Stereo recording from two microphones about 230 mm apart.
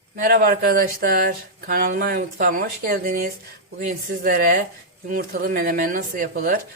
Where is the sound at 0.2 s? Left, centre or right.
Right.